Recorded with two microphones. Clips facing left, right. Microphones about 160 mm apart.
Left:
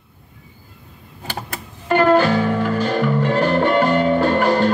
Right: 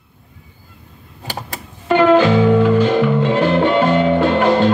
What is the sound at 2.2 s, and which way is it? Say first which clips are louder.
Music: right 6 dB; 20° right (ahead or behind).